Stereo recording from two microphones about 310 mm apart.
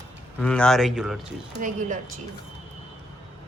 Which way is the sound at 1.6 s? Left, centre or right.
Right.